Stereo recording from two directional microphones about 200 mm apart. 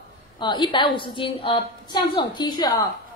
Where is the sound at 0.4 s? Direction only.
25° left (ahead or behind).